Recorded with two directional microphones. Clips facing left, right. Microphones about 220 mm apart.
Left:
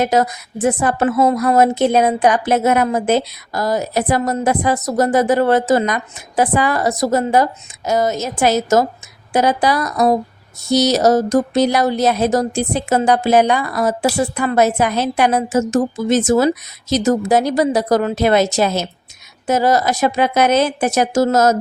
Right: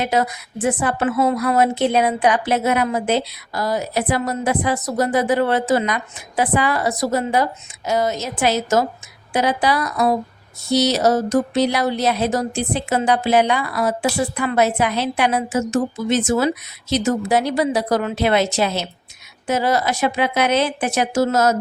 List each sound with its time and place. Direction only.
0.0 s a woman's voice: 45° left (ahead or behind)